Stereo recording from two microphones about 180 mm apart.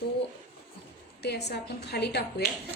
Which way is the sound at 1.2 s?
65° left (ahead or behind).